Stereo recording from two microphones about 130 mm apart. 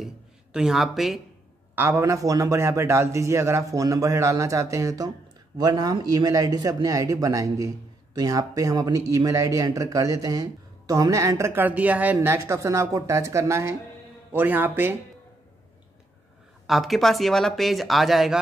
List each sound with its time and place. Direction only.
0.0 s a sound: 5° right (ahead or behind)
1.8 s speech: 20° right (ahead or behind)
16.6 s speech: centre (ahead or behind)